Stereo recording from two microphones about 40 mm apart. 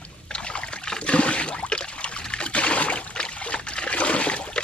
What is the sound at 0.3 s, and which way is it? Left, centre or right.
Trickle, left.